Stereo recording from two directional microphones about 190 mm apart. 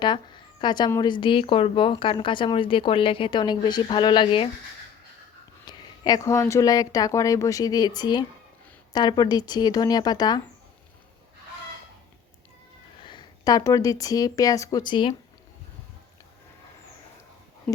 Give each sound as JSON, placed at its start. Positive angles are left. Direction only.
{"t": 0.0, "sound": "speech", "side_deg": 25}
{"t": 5.6, "sound": "speech", "side_deg": 20}
{"t": 13.1, "sound": "a woman's voice", "side_deg": 20}